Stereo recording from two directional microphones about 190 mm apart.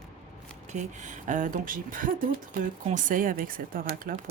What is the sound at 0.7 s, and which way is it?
Speech, 40° right (ahead or behind).